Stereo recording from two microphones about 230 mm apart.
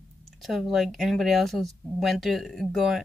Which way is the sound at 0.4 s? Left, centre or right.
Centre.